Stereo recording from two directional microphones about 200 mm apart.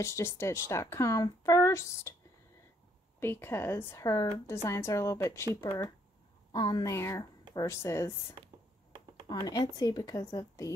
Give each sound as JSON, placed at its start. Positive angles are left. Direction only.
{"t": 0.0, "sound": "speech", "side_deg": 15}
{"t": 3.2, "sound": "speech", "side_deg": 10}
{"t": 6.5, "sound": "speech", "side_deg": 20}